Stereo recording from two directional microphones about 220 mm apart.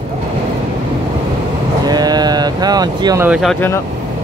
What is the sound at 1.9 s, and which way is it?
Vehicle, 20° right (ahead or behind).